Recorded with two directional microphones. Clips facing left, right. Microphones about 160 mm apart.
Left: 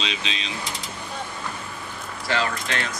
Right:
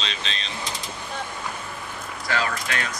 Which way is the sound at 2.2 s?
30° left (ahead or behind).